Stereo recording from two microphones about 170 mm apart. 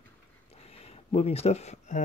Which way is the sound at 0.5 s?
35° left (ahead or behind).